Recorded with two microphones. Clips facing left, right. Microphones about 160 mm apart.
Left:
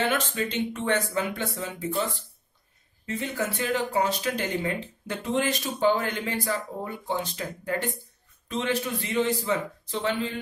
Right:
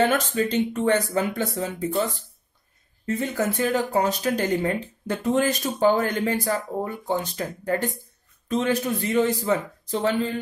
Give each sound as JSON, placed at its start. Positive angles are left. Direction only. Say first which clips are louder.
{"t": 0.1, "sound": "speech", "louder": "right 5 dB", "side_deg": -40}
{"t": 3.1, "sound": "speech", "louder": "right 5 dB", "side_deg": -45}